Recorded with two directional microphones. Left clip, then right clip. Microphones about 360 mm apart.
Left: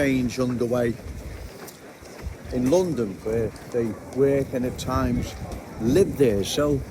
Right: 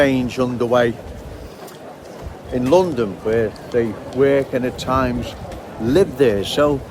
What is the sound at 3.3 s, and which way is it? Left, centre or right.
Speech, right.